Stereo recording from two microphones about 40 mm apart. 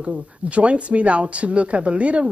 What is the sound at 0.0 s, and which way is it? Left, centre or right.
Speech, right.